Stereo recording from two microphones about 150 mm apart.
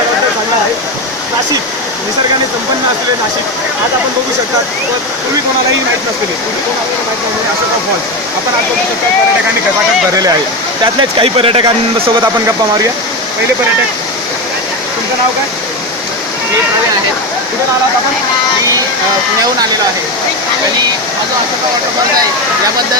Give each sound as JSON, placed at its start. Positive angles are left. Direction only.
{"t": 11.2, "sound": "speech", "side_deg": -35}